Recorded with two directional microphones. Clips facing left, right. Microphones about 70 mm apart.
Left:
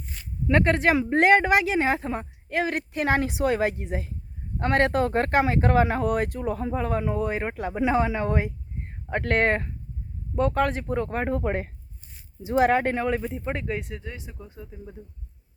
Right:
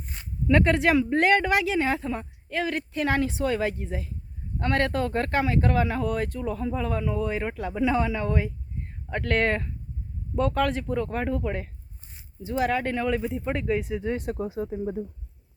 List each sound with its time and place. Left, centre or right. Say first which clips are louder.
0.5 s speech: even; centre
0.9 s speech: left 2 dB; centre
6.1 s speech: left 3 dB; centre
6.4 s speech: left 1 dB; left
9.3 s speech: left 2 dB; centre
13.0 s speech: even; centre
13.2 s speech: right 2 dB; centre
14.2 s speech: right 13 dB; right